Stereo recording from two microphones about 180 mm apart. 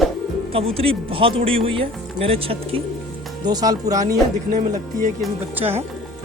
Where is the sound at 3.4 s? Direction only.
20° right (ahead or behind).